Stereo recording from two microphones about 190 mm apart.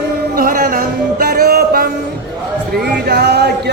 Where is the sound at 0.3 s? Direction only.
50° right (ahead or behind).